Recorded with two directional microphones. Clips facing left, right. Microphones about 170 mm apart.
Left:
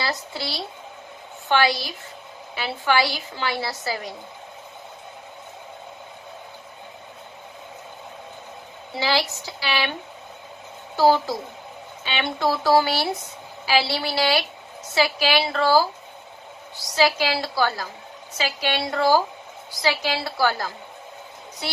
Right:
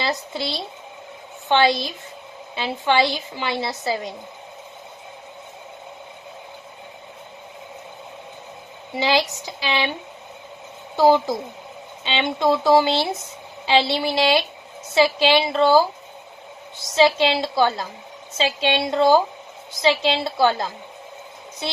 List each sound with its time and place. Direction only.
0.0 s a woman's voice: 20° right (ahead or behind)
8.9 s a woman's voice: 20° right (ahead or behind)
10.9 s a woman's voice: 20° right (ahead or behind)